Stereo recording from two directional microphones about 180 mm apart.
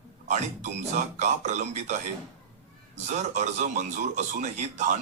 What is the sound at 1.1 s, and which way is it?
A man's voice, 40° right (ahead or behind).